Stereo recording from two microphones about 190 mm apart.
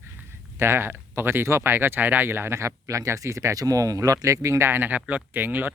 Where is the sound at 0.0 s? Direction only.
15° right (ahead or behind).